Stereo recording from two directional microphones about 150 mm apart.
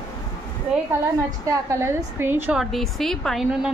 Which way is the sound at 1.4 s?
20° right (ahead or behind).